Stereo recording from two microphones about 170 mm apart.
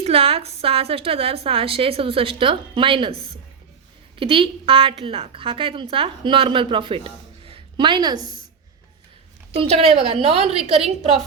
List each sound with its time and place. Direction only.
0.0 s a woman's voice: 35° right (ahead or behind)
9.6 s a woman's voice: 35° right (ahead or behind)